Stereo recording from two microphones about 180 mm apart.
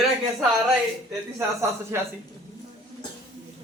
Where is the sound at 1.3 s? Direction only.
15° right (ahead or behind).